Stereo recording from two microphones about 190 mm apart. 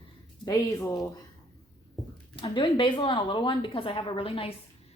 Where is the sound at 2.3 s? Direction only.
25° left (ahead or behind).